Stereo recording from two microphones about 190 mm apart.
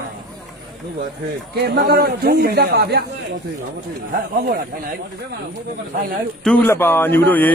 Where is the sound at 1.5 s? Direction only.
60° right (ahead or behind).